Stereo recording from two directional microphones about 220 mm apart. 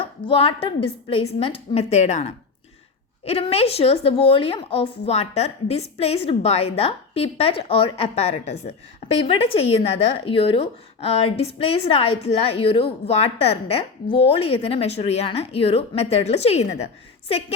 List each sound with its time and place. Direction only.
0.0 s a woman's voice: 25° left (ahead or behind)